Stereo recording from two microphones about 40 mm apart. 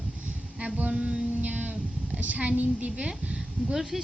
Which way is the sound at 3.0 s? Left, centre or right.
Right.